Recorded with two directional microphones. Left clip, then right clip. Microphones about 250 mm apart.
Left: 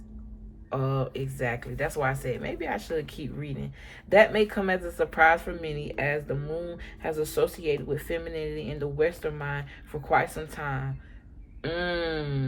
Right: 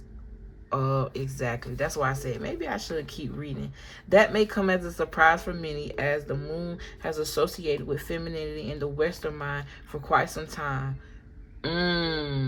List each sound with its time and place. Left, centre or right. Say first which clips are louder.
0.7 s speech: right 2 dB; centre